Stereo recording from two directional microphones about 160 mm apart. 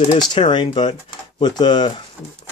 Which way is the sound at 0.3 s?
30° left (ahead or behind).